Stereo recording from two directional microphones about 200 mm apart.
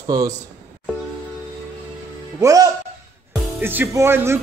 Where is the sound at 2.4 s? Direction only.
15° right (ahead or behind).